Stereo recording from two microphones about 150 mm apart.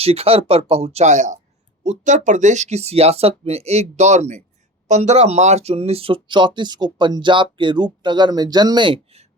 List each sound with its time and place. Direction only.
0.0 s speech: 40° right (ahead or behind)